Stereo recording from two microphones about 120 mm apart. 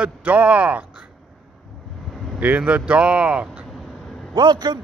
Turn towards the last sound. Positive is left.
turn(degrees=-35)  # may be behind; listen again after turning